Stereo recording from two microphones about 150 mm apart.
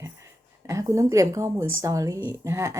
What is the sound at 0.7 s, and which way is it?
Speech, 20° right (ahead or behind).